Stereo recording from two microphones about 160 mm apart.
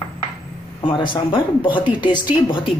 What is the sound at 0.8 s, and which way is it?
A woman's voice, 30° left (ahead or behind).